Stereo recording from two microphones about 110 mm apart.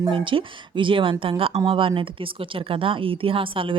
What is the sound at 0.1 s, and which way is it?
Speech, 55° right (ahead or behind).